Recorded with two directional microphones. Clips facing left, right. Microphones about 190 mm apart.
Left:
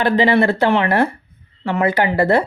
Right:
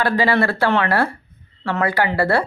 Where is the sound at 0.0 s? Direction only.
20° left (ahead or behind).